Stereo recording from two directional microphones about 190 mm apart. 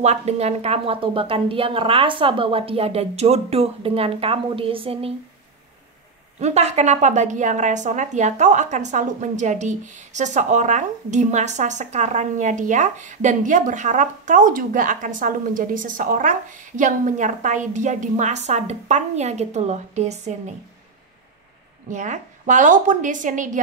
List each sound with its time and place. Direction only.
0.0 s a woman's voice: 35° right (ahead or behind)
6.4 s a woman's voice: 35° right (ahead or behind)
21.8 s a woman's voice: 40° right (ahead or behind)